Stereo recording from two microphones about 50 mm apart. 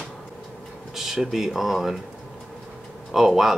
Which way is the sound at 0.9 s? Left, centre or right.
Centre.